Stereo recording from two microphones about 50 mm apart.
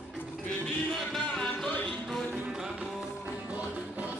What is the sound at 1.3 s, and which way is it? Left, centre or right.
Music, centre.